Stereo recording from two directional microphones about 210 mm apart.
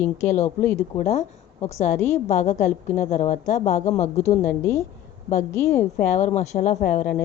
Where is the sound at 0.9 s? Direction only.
30° left (ahead or behind).